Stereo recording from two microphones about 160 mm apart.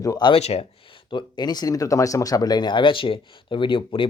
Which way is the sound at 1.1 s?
25° left (ahead or behind).